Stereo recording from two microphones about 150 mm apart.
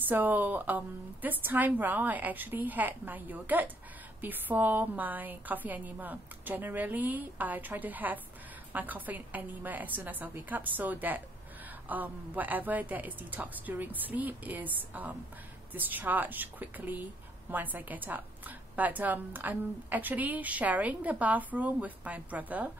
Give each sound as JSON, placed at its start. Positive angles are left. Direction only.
{"t": 0.1, "sound": "a woman's voice", "side_deg": -10}